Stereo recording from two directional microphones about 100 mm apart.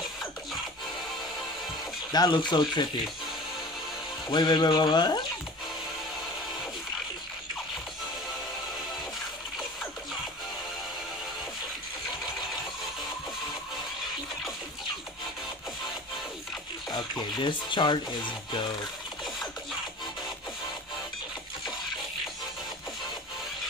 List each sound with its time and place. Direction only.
2.1 s speech: 50° left (ahead or behind)
4.3 s speech: 50° left (ahead or behind)
16.9 s speech: 45° left (ahead or behind)